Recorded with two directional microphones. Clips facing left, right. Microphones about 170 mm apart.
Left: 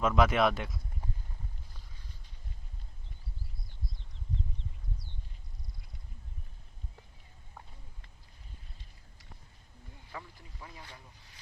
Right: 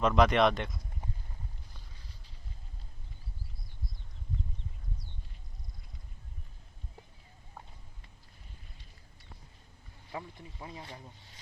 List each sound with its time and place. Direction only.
0.0 s speech: 5° left (ahead or behind)
10.1 s boat: 20° right (ahead or behind)